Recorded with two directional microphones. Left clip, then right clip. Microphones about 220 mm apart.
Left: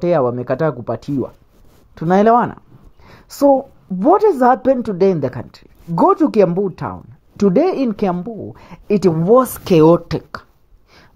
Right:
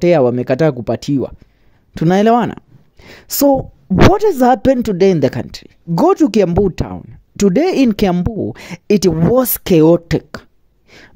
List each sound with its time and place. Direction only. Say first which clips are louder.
0.0 s speech: right 4 dB; 40° right (ahead or behind)